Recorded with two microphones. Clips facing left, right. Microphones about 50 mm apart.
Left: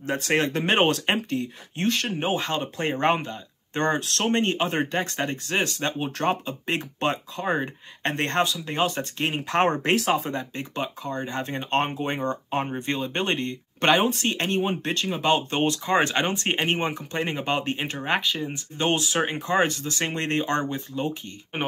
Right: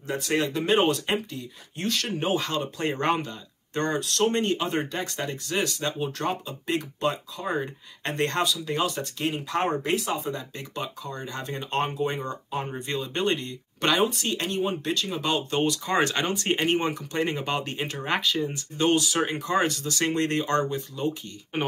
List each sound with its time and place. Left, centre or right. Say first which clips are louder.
0.0 s speech: left 2 dB; left
1.9 s speech: left 1 dB; left
10.3 s speech: left 4 dB; left
12.3 s speech: left 5 dB; left
12.7 s speech: left 2 dB; left
21.5 s speech: right 1 dB; left